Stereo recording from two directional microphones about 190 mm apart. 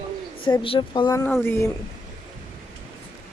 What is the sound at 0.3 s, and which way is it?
A woman's voice, 25° left (ahead or behind).